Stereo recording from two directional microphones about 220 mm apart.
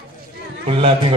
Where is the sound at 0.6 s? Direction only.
25° right (ahead or behind).